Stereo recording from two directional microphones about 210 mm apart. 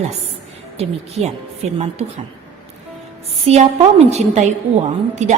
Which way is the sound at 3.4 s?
30° right (ahead or behind).